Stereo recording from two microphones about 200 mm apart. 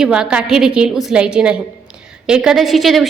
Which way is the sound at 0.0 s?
5° right (ahead or behind).